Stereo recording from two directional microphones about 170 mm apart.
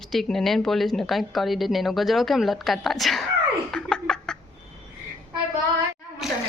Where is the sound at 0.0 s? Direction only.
Centre (ahead or behind).